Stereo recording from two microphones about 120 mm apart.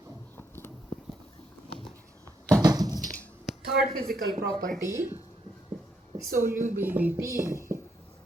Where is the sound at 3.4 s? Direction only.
5° right (ahead or behind).